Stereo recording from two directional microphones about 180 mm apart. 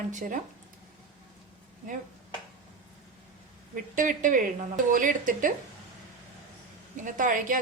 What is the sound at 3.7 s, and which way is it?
Speech, 45° right (ahead or behind).